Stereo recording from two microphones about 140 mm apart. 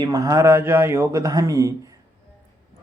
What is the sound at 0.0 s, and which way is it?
Speech, 25° right (ahead or behind).